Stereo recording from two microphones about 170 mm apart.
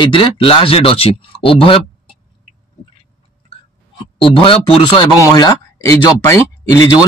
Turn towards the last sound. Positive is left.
turn(degrees=15)  # may be behind; listen again after turning